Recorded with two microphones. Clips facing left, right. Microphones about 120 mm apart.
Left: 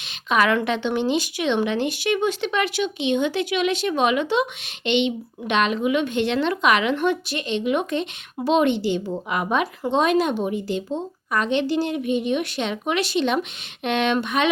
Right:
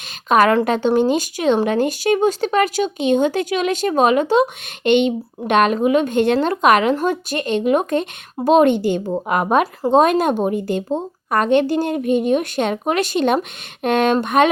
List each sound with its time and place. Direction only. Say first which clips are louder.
0.3 s speech: right 6 dB; 45° right (ahead or behind)